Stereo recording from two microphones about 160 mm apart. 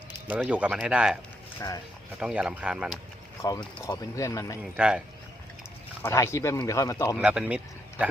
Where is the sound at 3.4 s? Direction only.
25° left (ahead or behind).